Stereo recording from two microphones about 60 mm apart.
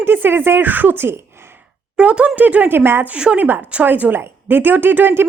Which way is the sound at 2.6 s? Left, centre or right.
Right.